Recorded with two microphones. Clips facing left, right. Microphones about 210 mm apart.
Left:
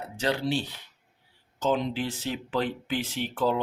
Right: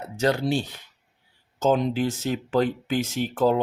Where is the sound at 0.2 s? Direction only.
45° right (ahead or behind).